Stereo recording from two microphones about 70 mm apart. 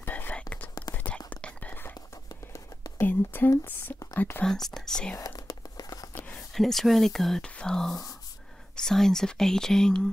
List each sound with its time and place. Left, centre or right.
0.0 s whispering: left
3.0 s speech: left
4.6 s speech: centre
5.2 s crumpling: left
6.1 s whispering: left
6.5 s speech: centre